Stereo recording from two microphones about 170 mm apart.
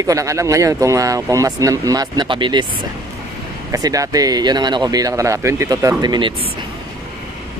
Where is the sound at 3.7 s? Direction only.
20° right (ahead or behind).